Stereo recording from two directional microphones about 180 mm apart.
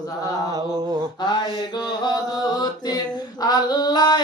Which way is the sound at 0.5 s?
20° right (ahead or behind).